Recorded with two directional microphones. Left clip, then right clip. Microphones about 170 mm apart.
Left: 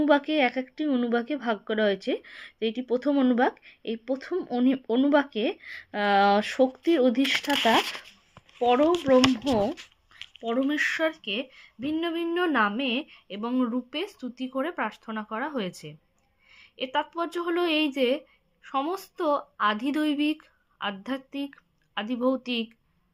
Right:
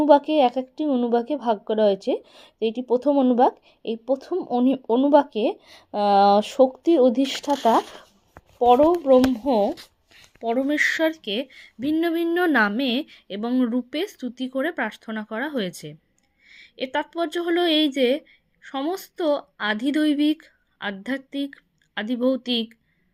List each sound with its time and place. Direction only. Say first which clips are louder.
0.1 s speech: right 8 dB; 20° right (ahead or behind)
0.9 s a woman's voice: right 4 dB; 15° left (ahead or behind)
1.1 s speech: right 5 dB; 20° right (ahead or behind)
1.6 s a woman's voice: right 6 dB; 15° left (ahead or behind)
1.9 s a woman's voice: right 5 dB; 20° right (ahead or behind)
8.5 s speech: right 6 dB; 25° right (ahead or behind)
10.7 s a woman's voice: right 6 dB; 25° right (ahead or behind)